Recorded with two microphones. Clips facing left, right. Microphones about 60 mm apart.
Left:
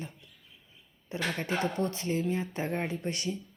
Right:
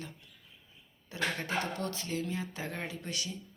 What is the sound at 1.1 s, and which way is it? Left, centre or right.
Speech, left.